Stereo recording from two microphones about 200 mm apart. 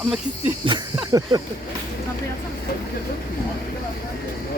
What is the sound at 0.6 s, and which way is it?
Speech, 25° right (ahead or behind).